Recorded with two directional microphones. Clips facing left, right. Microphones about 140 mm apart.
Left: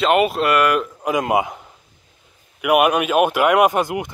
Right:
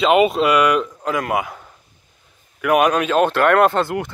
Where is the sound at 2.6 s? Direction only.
10° left (ahead or behind).